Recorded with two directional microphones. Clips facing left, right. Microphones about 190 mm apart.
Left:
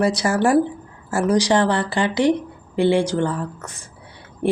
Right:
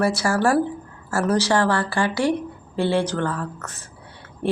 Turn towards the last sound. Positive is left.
turn(degrees=15)  # may be behind; listen again after turning